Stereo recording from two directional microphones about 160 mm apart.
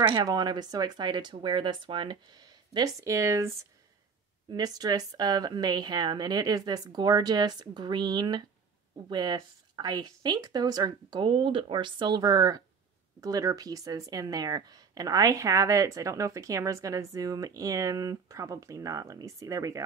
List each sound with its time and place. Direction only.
0.0 s speech: 25° right (ahead or behind)